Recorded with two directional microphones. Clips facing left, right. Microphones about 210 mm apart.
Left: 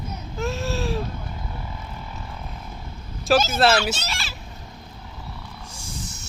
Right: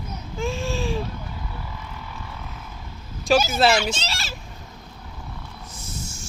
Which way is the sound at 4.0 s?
35° right (ahead or behind).